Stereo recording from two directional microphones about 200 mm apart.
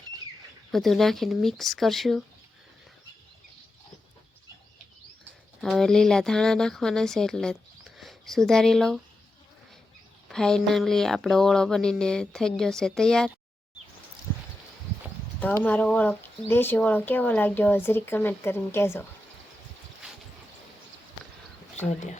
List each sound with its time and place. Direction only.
0.7 s speech: centre (ahead or behind)
5.5 s speech: centre (ahead or behind)
10.2 s speech: 5° left (ahead or behind)
15.6 s speech: 5° left (ahead or behind)
21.8 s speech: 35° left (ahead or behind)